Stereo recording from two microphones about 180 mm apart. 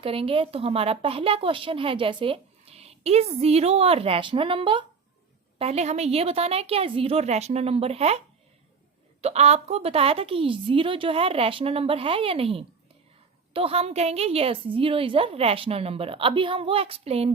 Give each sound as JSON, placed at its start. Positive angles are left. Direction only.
{"t": 0.0, "sound": "a woman's voice", "side_deg": -30}
{"t": 9.2, "sound": "a woman's voice", "side_deg": -35}